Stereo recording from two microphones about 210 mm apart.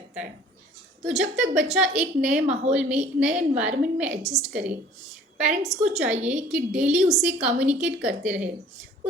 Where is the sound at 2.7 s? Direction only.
5° right (ahead or behind).